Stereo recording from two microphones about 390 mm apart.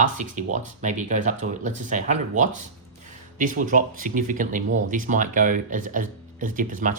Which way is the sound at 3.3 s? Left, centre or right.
Centre.